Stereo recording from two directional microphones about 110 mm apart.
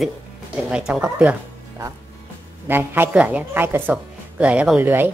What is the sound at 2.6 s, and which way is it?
Speech, 20° right (ahead or behind).